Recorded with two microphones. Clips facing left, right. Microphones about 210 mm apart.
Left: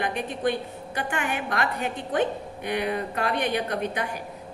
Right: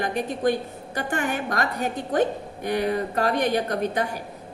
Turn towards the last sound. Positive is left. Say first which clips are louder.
# right 3 dB
turn(degrees=-40)  # may be behind; listen again after turning